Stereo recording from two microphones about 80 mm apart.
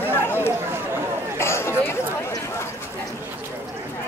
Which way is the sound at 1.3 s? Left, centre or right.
Left.